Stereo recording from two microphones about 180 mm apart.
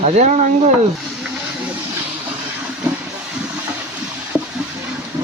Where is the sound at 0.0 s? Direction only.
40° right (ahead or behind).